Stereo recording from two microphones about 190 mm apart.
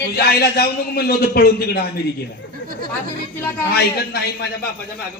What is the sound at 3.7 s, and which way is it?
Speech, 55° left (ahead or behind).